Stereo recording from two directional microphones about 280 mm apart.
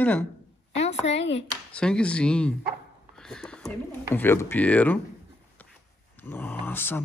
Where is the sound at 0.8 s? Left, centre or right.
Left.